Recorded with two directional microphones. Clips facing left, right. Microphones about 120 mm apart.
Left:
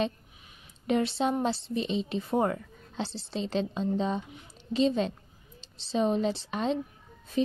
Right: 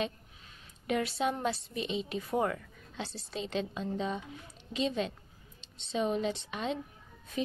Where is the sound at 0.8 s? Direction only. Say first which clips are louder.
Left 4 dB; 30° left (ahead or behind).